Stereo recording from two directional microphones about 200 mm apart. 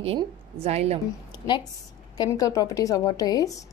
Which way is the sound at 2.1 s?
20° left (ahead or behind).